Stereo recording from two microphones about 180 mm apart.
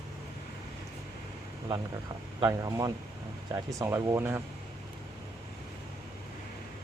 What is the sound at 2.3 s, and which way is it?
Speech, 20° right (ahead or behind).